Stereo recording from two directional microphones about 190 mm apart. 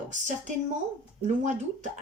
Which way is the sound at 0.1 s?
40° right (ahead or behind).